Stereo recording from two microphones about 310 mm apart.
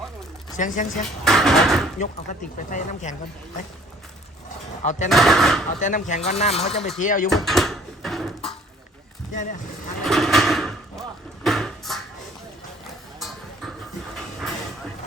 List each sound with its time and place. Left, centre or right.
0.5 s speech: left
1.2 s speech: centre
2.6 s speech: left
4.8 s speech: left
5.0 s speech: centre
5.8 s speech: left
7.3 s speech: centre
9.3 s speech: left
10.0 s a sound: centre
11.4 s beatboxing: centre
13.1 s clip-clop: centre